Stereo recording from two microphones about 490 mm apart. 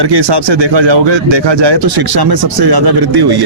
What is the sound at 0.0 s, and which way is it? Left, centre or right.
Speech, right.